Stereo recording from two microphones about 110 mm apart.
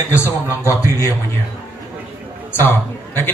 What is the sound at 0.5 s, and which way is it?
Speech, 30° left (ahead or behind).